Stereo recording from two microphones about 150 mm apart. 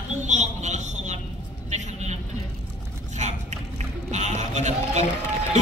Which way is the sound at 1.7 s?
50° right (ahead or behind).